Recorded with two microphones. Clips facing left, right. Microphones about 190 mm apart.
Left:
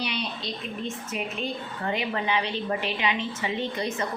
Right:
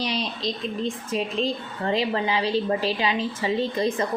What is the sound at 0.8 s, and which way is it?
A woman's voice, 30° right (ahead or behind).